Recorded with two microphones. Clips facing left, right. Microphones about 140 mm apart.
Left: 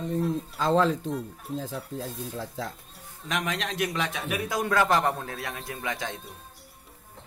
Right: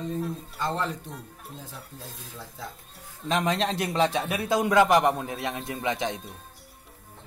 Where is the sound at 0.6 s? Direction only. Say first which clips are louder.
Left 7 dB; 90° left.